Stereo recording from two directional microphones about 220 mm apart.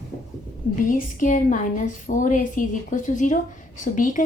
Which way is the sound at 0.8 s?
35° left (ahead or behind).